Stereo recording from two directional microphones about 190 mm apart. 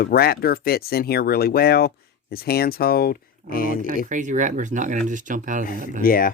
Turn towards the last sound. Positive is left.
turn(degrees=50)  # may be behind; listen again after turning